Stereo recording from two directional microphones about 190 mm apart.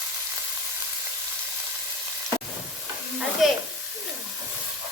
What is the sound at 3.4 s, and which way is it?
Speech, centre (ahead or behind).